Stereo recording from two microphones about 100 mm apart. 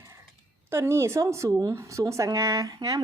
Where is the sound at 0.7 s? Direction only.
25° right (ahead or behind).